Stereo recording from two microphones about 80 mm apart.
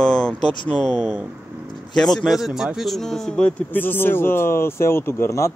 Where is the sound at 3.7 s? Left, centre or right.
Left.